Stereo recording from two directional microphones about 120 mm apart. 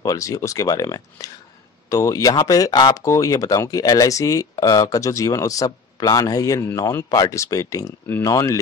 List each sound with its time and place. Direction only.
0.0 s speech: 30° left (ahead or behind)